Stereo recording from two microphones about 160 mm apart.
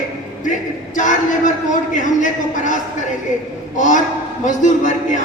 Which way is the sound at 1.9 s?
50° left (ahead or behind).